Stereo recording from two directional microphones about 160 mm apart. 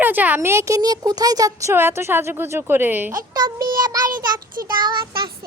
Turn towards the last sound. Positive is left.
turn(degrees=-30)  # may be behind; listen again after turning